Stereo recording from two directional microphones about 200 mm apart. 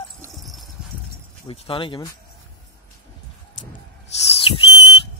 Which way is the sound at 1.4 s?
25° left (ahead or behind).